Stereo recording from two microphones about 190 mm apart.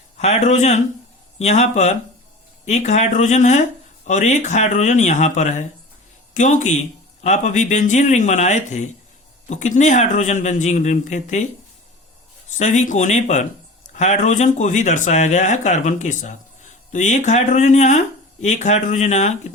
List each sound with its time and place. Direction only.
0.2 s speech: 35° left (ahead or behind)
12.5 s speech: 40° left (ahead or behind)